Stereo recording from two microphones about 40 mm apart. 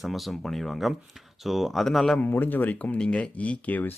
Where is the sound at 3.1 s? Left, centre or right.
Left.